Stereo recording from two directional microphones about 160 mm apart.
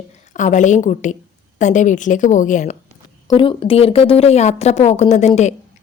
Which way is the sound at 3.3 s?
35° left (ahead or behind).